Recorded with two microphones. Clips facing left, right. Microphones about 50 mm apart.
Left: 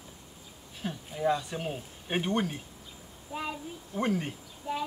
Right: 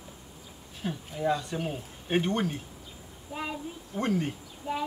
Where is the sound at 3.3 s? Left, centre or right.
Centre.